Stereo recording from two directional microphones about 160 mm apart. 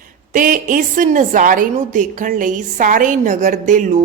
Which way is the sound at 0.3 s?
55° right (ahead or behind).